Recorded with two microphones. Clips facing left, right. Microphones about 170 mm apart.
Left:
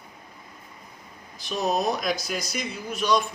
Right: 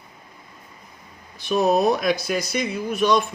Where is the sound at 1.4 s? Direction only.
60° right (ahead or behind).